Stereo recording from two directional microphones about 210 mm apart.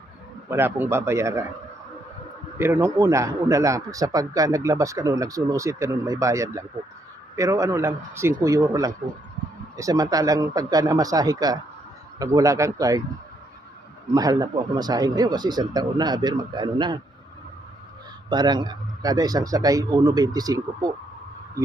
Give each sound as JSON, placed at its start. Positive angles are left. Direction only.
{"t": 0.5, "sound": "a man's voice", "side_deg": -10}
{"t": 2.6, "sound": "a man's voice", "side_deg": -10}
{"t": 14.1, "sound": "speech", "side_deg": -15}
{"t": 18.3, "sound": "a man's voice", "side_deg": -20}